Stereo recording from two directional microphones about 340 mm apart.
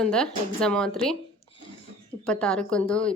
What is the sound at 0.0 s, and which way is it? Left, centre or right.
Speech, centre.